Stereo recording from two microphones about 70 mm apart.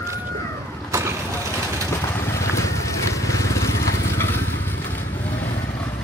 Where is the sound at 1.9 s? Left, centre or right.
Left.